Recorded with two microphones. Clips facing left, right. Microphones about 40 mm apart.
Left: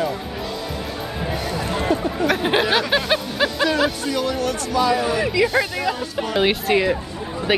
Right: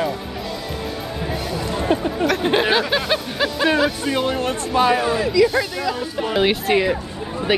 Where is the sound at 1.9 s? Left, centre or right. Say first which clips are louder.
Right 2 dB; right.